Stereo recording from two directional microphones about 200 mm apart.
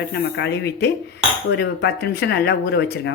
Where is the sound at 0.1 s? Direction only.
60° left (ahead or behind).